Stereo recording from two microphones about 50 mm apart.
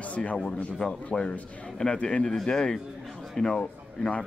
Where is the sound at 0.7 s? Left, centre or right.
Centre.